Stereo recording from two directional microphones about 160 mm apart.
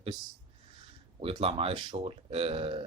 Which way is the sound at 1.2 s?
35° right (ahead or behind).